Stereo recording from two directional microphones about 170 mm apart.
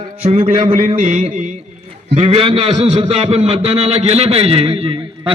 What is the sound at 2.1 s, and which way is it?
A man's voice, 35° right (ahead or behind).